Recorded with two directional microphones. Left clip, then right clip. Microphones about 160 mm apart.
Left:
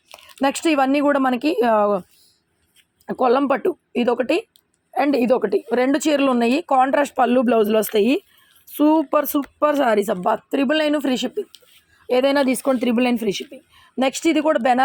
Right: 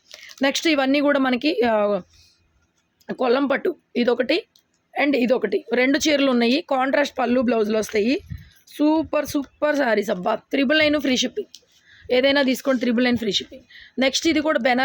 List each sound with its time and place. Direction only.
0.1 s speech: 20° left (ahead or behind)
3.1 s speech: 15° left (ahead or behind)
6.9 s speech: 25° left (ahead or behind); by 11.4 s 5° left (ahead or behind)
12.0 s speech: 20° left (ahead or behind)